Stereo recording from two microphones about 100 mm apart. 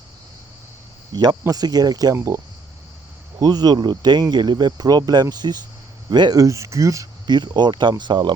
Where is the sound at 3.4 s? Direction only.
40° right (ahead or behind).